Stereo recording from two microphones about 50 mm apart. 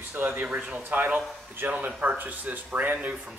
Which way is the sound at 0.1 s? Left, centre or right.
Right.